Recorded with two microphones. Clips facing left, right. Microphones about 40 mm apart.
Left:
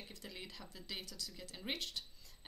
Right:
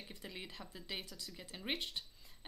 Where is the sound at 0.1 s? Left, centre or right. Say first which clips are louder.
Right 2 dB; centre.